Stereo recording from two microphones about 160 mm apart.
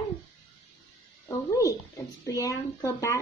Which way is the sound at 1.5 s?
20° left (ahead or behind).